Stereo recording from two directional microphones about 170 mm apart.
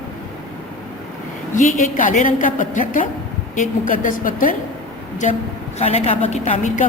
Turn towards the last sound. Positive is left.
turn(degrees=45)  # may be behind; listen again after turning